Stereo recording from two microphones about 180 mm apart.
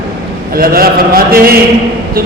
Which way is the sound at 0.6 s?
55° right (ahead or behind).